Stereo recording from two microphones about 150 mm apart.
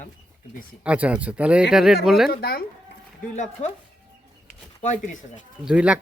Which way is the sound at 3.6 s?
45° left (ahead or behind).